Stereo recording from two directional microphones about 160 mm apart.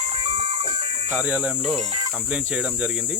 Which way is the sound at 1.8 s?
40° right (ahead or behind).